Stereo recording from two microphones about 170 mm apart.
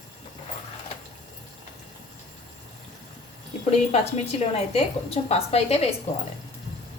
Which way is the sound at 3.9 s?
40° left (ahead or behind).